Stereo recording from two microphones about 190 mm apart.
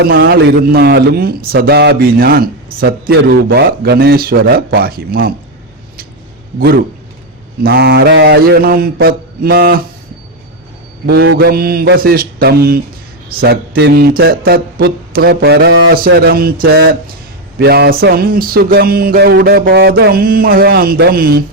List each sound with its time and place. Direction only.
0.0 s a man's voice: 55° right (ahead or behind)
7.6 s a man's voice: 55° right (ahead or behind)
11.0 s a man's voice: 55° right (ahead or behind)